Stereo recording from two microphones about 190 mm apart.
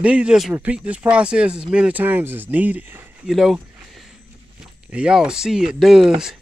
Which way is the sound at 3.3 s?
Centre (ahead or behind).